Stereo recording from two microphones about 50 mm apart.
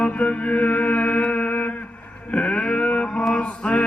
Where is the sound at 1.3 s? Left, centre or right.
Left.